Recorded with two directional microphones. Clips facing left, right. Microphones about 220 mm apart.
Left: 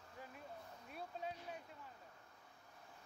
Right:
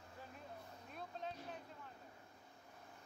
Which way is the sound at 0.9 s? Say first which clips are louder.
Left 1 dB; 10° left (ahead or behind).